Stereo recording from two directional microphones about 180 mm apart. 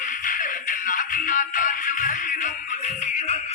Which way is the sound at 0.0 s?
45° left (ahead or behind).